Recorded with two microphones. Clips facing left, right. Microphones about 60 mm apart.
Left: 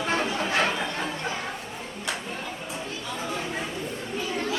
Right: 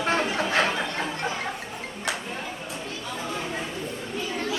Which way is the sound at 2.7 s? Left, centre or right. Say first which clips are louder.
Even; centre.